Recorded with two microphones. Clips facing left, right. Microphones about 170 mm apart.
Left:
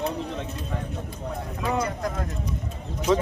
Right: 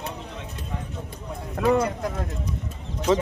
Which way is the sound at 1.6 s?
60° right (ahead or behind).